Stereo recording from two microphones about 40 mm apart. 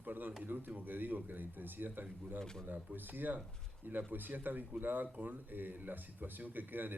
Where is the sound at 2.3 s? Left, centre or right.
Centre.